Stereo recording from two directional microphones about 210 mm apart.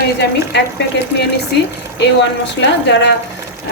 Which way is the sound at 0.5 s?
55° left (ahead or behind).